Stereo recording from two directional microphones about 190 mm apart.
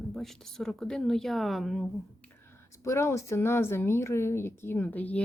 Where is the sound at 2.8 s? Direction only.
15° left (ahead or behind).